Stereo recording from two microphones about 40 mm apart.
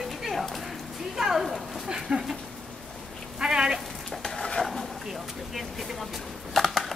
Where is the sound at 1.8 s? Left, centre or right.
Centre.